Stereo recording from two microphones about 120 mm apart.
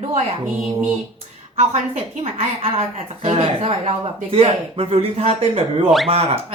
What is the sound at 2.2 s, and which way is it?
A woman's voice, 60° right (ahead or behind).